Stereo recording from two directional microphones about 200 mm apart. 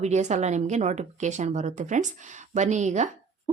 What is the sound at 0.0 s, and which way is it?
Speech, 35° right (ahead or behind).